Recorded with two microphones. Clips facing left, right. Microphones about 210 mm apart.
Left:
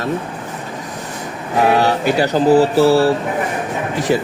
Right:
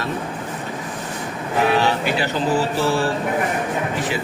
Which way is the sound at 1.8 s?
45° left (ahead or behind).